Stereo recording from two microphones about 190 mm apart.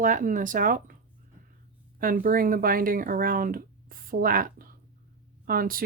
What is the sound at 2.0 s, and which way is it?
Speech, 45° right (ahead or behind).